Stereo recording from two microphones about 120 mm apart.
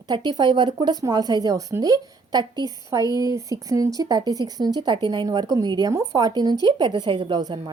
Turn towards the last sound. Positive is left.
turn(degrees=-35)  # may be behind; listen again after turning